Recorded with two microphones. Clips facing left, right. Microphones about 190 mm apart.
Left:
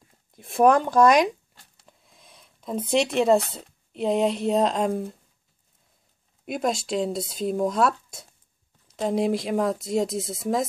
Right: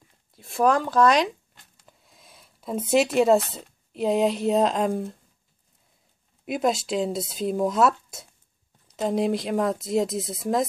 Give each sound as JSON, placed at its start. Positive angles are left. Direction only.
{"t": 0.5, "sound": "speech", "side_deg": 20}
{"t": 1.9, "sound": "speech", "side_deg": 0}
{"t": 6.4, "sound": "speech", "side_deg": 0}